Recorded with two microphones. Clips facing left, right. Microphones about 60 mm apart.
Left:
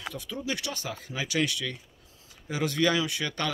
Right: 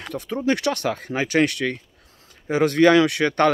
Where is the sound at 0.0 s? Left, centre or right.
Right.